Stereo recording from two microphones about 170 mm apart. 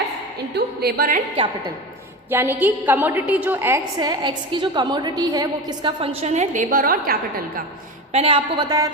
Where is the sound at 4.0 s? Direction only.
25° right (ahead or behind); by 7.2 s 55° right (ahead or behind).